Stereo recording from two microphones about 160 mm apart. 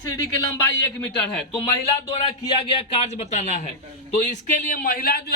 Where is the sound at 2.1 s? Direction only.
40° left (ahead or behind).